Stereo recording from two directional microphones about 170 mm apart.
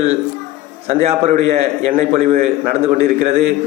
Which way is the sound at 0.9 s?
35° right (ahead or behind).